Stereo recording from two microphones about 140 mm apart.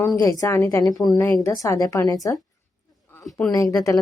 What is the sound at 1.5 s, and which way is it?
Speech, 20° left (ahead or behind).